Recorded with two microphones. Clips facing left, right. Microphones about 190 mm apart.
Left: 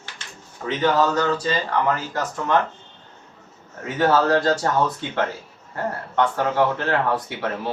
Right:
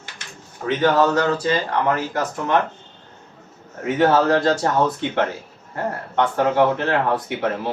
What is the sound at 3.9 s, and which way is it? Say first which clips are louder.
Speech: right 2 dB; 25° right (ahead or behind).